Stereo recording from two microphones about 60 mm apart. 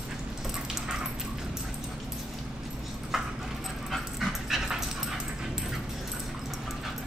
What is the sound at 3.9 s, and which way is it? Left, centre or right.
Dog, centre.